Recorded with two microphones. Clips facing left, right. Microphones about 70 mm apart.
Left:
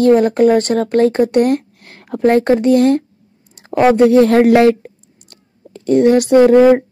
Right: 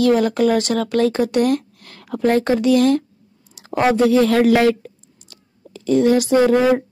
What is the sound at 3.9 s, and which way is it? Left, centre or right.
Speech, left.